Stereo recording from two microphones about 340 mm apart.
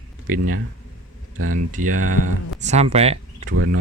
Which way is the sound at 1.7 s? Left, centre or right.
Right.